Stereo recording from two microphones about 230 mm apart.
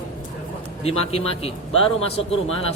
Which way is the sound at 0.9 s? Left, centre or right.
Left.